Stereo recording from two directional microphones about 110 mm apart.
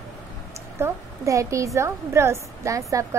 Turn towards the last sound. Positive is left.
turn(degrees=-30)  # may be behind; listen again after turning